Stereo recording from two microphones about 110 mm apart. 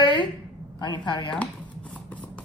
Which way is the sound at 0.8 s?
45° left (ahead or behind).